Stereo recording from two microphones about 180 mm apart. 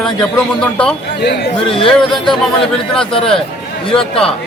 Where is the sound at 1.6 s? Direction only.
30° left (ahead or behind).